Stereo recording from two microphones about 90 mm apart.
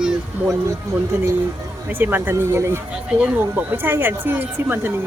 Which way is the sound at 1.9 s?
20° right (ahead or behind).